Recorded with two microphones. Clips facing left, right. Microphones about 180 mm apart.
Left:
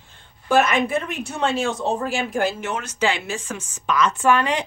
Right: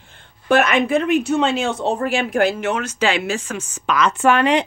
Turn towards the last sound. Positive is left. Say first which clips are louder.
# right 4 dB
turn(degrees=-65)  # may be behind; listen again after turning